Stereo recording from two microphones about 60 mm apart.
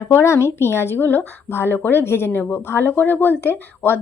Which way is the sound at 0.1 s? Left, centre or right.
Left.